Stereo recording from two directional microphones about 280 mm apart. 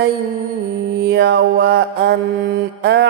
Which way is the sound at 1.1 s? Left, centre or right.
Right.